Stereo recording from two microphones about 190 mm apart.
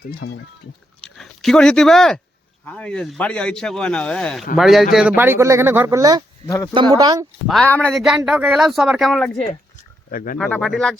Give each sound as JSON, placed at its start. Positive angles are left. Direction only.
{"t": 0.0, "sound": "speech", "side_deg": 60}
{"t": 1.1, "sound": "speech", "side_deg": 0}
{"t": 7.4, "sound": "speech", "side_deg": 5}
{"t": 10.1, "sound": "speech", "side_deg": 45}
{"t": 10.3, "sound": "speech", "side_deg": 5}